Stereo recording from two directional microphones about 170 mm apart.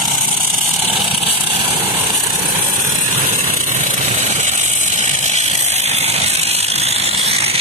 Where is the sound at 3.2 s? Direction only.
55° right (ahead or behind); by 7.6 s 35° right (ahead or behind).